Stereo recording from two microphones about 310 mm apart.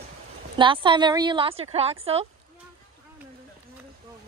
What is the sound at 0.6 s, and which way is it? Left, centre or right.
A woman's voice, centre.